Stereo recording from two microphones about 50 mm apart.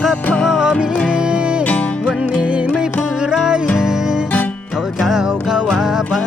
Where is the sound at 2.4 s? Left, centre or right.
Right.